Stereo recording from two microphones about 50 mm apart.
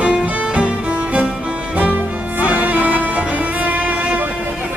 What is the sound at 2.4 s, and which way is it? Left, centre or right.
Music, right.